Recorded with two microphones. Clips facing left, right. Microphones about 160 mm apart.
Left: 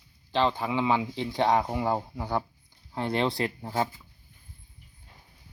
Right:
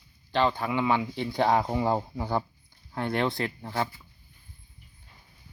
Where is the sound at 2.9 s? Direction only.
25° left (ahead or behind).